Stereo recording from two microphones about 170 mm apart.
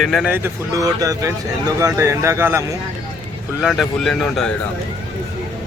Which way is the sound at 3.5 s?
5° right (ahead or behind).